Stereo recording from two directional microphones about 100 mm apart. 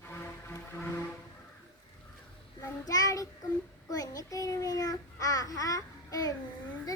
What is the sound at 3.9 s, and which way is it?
Babbling, 40° left (ahead or behind).